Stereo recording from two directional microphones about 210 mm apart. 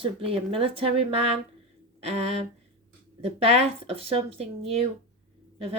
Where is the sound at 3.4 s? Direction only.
30° right (ahead or behind).